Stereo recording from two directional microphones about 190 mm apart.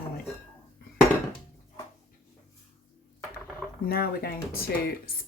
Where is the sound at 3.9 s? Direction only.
55° left (ahead or behind).